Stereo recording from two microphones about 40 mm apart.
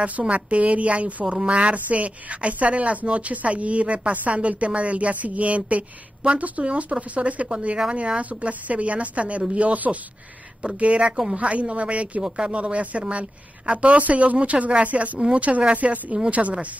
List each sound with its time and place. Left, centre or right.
0.2 s a woman's voice: right
8.2 s a woman's voice: right